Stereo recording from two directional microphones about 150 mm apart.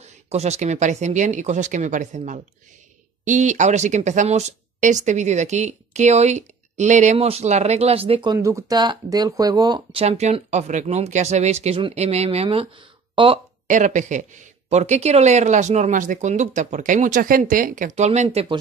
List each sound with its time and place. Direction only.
0.0 s speech: 45° right (ahead or behind)
8.4 s speech: 20° right (ahead or behind)
10.0 s speech: 45° right (ahead or behind)
13.7 s speech: 55° right (ahead or behind); by 18.6 s 40° right (ahead or behind)